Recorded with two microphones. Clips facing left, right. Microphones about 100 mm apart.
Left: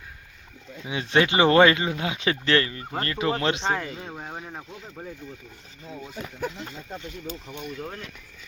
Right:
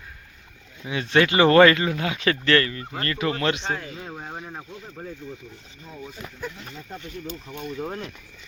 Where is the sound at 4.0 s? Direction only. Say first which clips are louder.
Right 1 dB; centre (ahead or behind).